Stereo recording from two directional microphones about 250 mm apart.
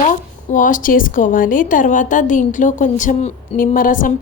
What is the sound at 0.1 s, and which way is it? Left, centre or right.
A woman's voice, left.